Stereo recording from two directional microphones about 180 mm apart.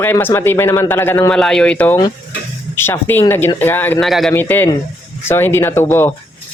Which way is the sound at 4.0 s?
Centre (ahead or behind).